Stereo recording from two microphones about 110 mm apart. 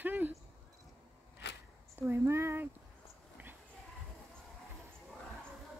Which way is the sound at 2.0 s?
20° right (ahead or behind).